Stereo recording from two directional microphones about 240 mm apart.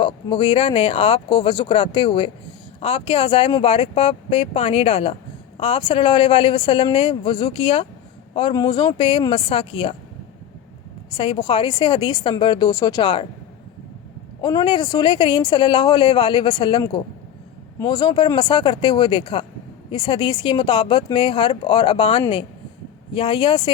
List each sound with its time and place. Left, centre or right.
0.0 s a woman's voice: left
11.1 s a woman's voice: left
14.4 s a woman's voice: centre